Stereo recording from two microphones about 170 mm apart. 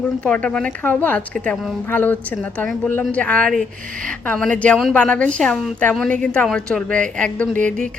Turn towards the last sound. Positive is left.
turn(degrees=-50)  # may be behind; listen again after turning